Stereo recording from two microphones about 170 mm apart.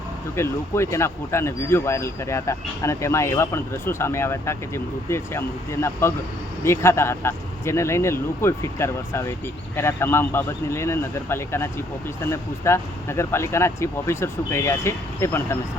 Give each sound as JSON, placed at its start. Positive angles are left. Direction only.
{"t": 0.3, "sound": "speech", "side_deg": 15}